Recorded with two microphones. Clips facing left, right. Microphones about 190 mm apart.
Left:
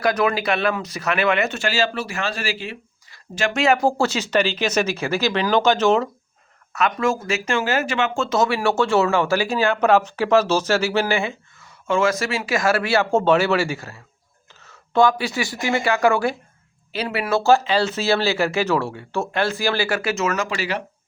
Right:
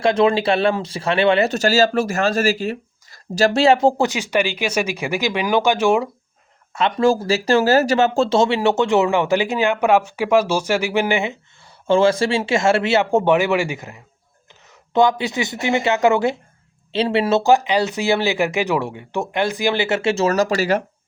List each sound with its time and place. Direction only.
0.0 s speech: 25° right (ahead or behind)
6.7 s speech: 30° right (ahead or behind)
11.9 s speech: 30° right (ahead or behind)